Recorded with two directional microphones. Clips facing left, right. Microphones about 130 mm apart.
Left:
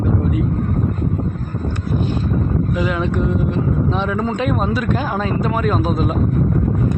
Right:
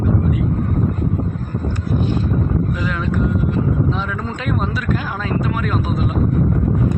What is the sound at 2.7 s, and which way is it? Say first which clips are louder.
Speech: left 2 dB; 15° left (ahead or behind).